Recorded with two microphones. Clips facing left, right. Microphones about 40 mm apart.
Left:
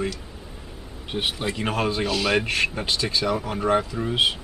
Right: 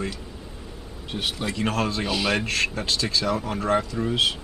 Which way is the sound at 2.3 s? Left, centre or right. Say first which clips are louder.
Left 2 dB; centre.